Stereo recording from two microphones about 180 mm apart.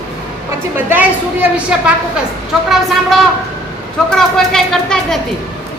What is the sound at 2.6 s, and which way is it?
A woman's voice, centre (ahead or behind).